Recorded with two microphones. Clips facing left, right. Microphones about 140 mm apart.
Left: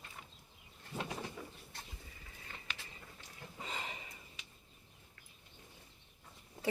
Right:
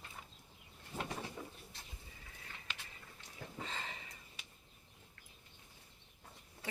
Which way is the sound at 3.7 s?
15° left (ahead or behind).